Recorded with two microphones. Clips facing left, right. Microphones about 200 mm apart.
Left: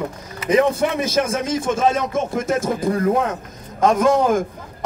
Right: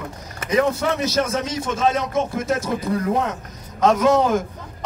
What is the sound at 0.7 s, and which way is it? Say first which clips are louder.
A man's voice: left 2 dB; 50° left (ahead or behind).